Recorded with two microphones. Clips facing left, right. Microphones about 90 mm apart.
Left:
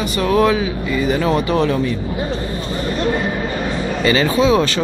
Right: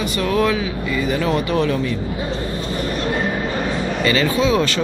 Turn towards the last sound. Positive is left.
turn(degrees=15)  # may be behind; listen again after turning